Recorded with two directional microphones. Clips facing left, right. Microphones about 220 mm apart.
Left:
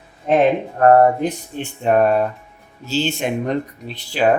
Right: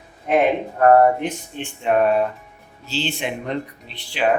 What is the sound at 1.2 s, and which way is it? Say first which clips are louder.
Speech: left 4 dB; 40° left (ahead or behind).